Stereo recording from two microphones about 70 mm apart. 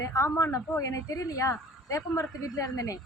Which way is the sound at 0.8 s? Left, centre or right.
Left.